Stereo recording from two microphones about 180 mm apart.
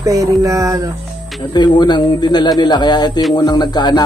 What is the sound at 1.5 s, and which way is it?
A man's voice, 25° left (ahead or behind).